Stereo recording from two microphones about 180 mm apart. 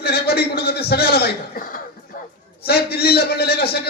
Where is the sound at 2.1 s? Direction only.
50° left (ahead or behind).